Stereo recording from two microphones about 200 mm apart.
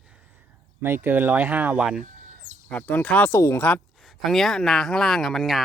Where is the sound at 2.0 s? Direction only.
35° right (ahead or behind).